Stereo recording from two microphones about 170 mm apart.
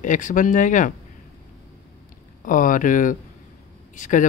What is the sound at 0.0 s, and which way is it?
Speech, 50° left (ahead or behind).